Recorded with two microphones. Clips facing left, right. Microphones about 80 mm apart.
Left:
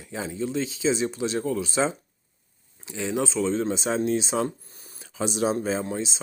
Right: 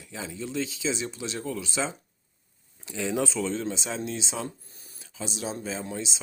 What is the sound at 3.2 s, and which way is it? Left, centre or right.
Speech, left.